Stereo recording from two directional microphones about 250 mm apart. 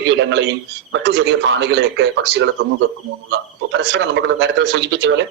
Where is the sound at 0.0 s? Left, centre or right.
Right.